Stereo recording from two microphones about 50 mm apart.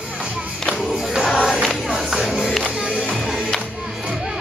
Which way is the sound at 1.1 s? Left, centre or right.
Centre.